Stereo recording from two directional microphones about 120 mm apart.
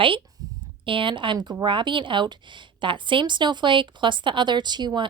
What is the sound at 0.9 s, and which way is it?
A woman's voice, 45° right (ahead or behind).